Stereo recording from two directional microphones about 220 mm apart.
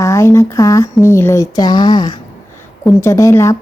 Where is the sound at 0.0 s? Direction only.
15° left (ahead or behind).